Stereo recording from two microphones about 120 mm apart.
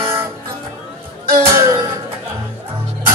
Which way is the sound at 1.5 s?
25° right (ahead or behind).